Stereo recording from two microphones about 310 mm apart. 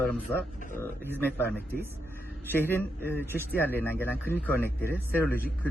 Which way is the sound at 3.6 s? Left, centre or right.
Centre.